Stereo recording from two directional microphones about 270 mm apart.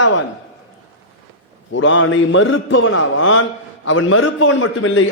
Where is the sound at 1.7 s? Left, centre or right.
Left.